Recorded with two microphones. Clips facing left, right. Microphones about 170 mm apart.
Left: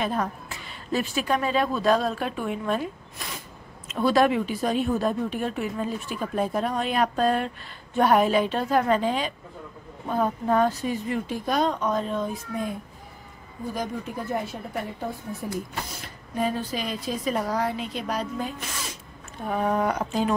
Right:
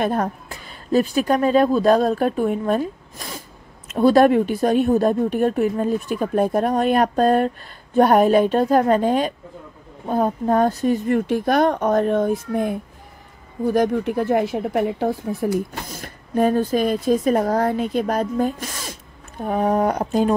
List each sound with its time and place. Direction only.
0.0 s a woman's voice: 50° right (ahead or behind)
10.0 s speech: 35° right (ahead or behind); by 12.7 s 60° right (ahead or behind)
13.7 s speech: 70° right (ahead or behind)
16.0 s speech: 50° right (ahead or behind)